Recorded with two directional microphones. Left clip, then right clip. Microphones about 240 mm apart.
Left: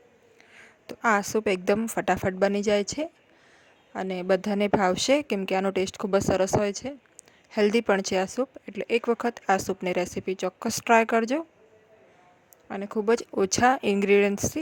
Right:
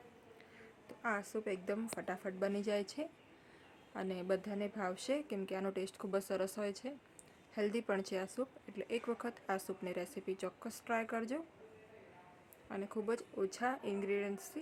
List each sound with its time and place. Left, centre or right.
0.5 s a woman's voice: left
12.6 s speech: left